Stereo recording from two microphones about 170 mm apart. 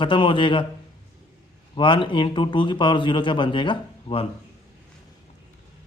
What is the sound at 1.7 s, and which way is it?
Speech, 30° left (ahead or behind).